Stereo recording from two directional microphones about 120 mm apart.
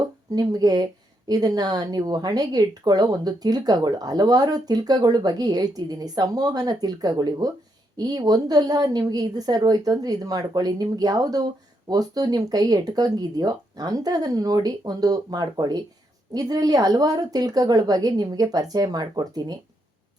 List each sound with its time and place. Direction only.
0.3 s speech: 35° right (ahead or behind)